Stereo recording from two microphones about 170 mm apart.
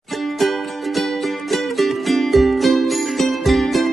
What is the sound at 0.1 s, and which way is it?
Music, centre (ahead or behind).